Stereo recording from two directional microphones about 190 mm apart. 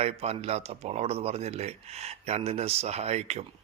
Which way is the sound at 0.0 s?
35° right (ahead or behind).